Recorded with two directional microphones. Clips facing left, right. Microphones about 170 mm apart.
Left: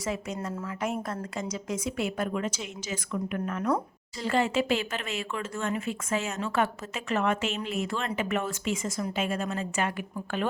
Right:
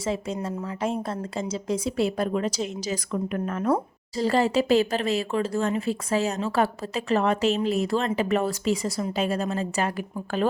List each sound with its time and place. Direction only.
0.0 s speech: 30° right (ahead or behind)